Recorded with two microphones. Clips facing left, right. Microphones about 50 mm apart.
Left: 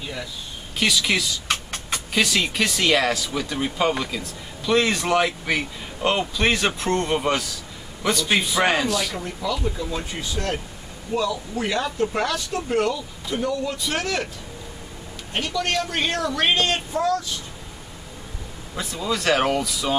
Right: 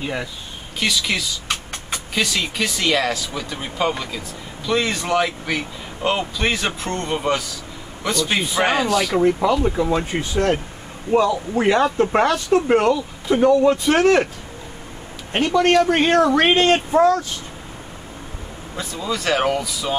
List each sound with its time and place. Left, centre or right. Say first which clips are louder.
0.0 s speech: right 6 dB; right
0.7 s a man's voice: even; centre
9.2 s speech: right 10 dB; right
15.3 s speech: right 9 dB; right
18.8 s a man's voice: even; centre